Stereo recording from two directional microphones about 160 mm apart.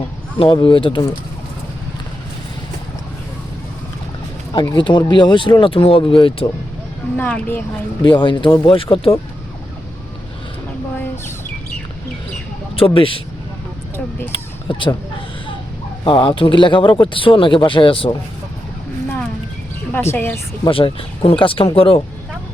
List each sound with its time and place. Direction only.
0.3 s speech: 35° left (ahead or behind)
4.5 s speech: 25° left (ahead or behind)
7.2 s speech: 10° left (ahead or behind)
8.0 s speech: 30° left (ahead or behind)
12.7 s speech: 35° left (ahead or behind)
14.7 s speech: 30° left (ahead or behind)
16.0 s speech: 35° left (ahead or behind)
19.0 s a sound: 10° left (ahead or behind)
19.9 s speech: 15° left (ahead or behind)
20.7 s speech: 35° left (ahead or behind)